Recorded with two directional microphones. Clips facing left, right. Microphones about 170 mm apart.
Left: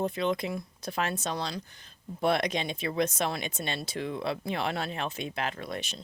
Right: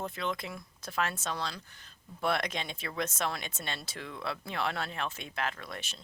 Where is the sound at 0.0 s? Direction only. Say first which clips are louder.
Left 7 dB; 20° left (ahead or behind).